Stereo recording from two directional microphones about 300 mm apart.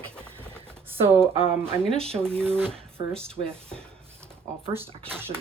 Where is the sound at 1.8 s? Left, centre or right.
Centre.